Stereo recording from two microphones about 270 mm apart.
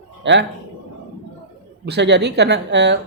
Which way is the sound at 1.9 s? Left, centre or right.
Right.